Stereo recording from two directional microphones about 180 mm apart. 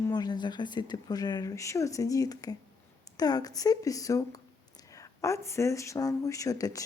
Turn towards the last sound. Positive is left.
turn(degrees=20)  # may be behind; listen again after turning